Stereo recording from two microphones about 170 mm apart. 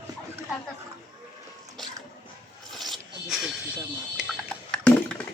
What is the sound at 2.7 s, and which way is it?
Zipper, centre (ahead or behind).